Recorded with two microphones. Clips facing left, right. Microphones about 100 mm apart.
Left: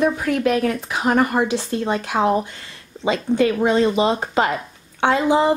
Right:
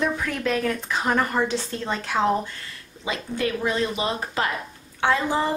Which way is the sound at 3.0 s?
30° left (ahead or behind).